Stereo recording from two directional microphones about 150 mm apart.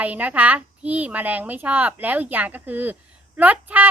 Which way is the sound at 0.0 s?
10° right (ahead or behind).